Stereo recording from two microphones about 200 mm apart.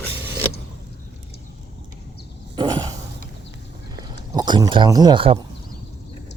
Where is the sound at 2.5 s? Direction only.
20° right (ahead or behind).